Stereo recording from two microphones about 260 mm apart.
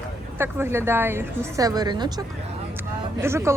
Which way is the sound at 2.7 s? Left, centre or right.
Centre.